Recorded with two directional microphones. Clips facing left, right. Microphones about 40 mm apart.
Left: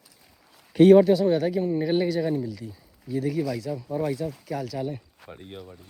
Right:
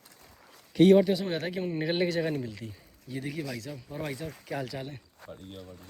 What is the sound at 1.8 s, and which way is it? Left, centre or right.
Speech, right.